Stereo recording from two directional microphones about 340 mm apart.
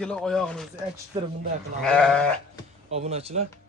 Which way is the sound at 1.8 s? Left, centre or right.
Centre.